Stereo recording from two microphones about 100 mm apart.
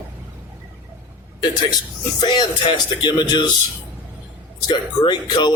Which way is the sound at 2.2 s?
50° left (ahead or behind).